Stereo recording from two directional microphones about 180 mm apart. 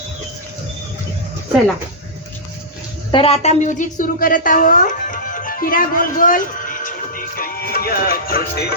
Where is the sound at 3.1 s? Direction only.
30° left (ahead or behind).